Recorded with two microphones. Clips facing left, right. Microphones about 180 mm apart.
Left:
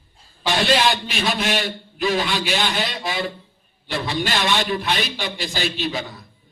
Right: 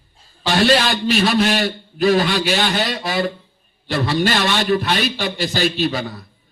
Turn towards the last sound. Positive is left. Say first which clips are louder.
# right 6 dB
turn(degrees=-45)  # may be behind; listen again after turning